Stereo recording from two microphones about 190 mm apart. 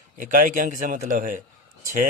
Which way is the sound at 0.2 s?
45° right (ahead or behind).